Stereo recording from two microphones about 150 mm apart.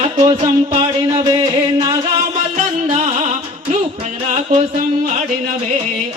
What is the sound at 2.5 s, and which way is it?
Music, 55° right (ahead or behind).